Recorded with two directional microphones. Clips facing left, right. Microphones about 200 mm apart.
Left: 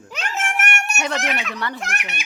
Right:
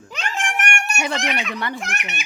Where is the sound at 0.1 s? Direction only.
5° left (ahead or behind).